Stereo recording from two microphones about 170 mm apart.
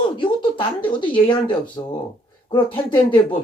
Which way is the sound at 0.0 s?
30° left (ahead or behind).